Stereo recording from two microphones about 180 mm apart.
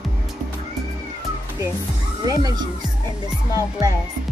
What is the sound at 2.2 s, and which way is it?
Speech, 20° right (ahead or behind).